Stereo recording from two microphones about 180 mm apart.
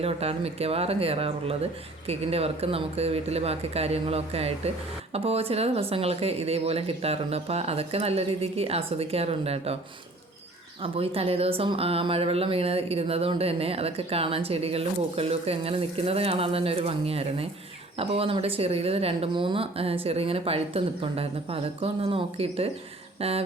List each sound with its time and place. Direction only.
0.0 s speech: 35° right (ahead or behind)
10.8 s speech: 30° right (ahead or behind)